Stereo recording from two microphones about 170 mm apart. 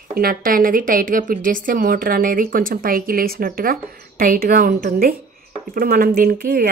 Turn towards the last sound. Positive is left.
turn(degrees=-55)  # may be behind; listen again after turning